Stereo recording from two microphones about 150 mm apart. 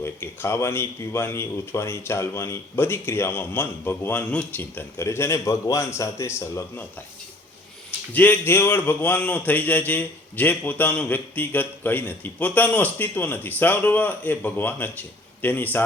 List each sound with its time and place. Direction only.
0.0 s a man's voice: 15° left (ahead or behind)
8.1 s a man's voice: 10° left (ahead or behind)